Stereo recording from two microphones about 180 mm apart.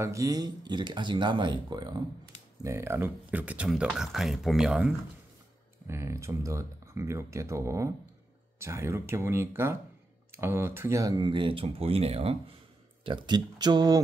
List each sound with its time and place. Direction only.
0.0 s speech: 20° right (ahead or behind)
5.9 s speech: 15° right (ahead or behind)